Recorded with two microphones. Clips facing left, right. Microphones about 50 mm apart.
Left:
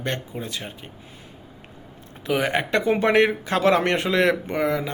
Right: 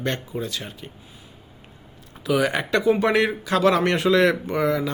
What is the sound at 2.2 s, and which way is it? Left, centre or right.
Speech, left.